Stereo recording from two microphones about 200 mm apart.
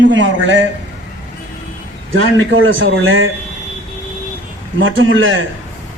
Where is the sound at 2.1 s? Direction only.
70° right (ahead or behind).